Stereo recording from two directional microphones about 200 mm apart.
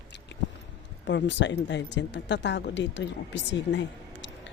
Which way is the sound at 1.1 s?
60° left (ahead or behind).